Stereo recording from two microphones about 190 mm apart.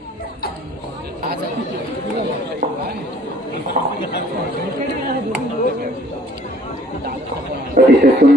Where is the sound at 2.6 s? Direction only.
50° right (ahead or behind).